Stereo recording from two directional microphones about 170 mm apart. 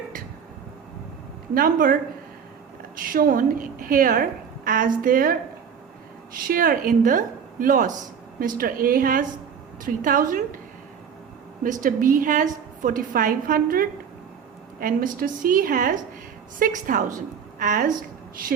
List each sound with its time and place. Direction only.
1.5 s a woman's voice: 55° right (ahead or behind)
3.0 s a woman's voice: 55° right (ahead or behind)
11.6 s a woman's voice: 50° right (ahead or behind)